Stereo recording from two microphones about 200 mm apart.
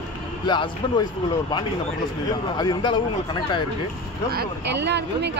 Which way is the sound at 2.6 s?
20° left (ahead or behind).